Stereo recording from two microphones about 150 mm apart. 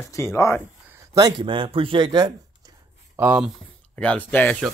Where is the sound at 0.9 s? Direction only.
20° right (ahead or behind).